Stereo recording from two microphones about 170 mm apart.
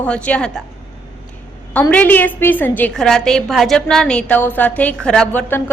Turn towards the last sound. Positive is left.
turn(degrees=5)  # may be behind; listen again after turning